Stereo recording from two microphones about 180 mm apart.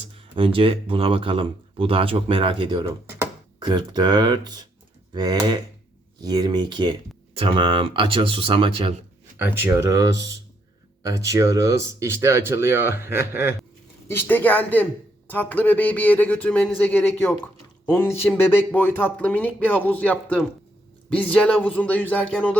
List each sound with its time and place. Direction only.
0.3 s speech: 30° right (ahead or behind)
9.4 s speech: 15° right (ahead or behind)
14.1 s speech: 10° left (ahead or behind)